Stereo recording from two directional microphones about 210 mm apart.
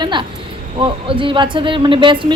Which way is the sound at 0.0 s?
20° right (ahead or behind).